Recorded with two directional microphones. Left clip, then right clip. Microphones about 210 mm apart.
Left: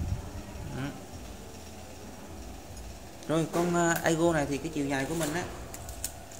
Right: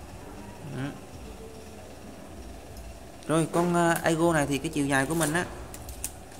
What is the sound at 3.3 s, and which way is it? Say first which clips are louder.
Speech: right 3 dB; 15° right (ahead or behind).